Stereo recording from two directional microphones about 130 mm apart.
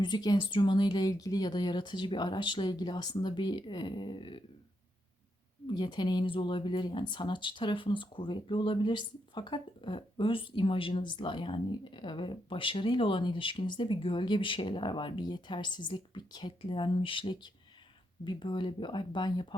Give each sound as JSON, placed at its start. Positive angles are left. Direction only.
{"t": 0.0, "sound": "speech", "side_deg": 35}
{"t": 5.6, "sound": "speech", "side_deg": 35}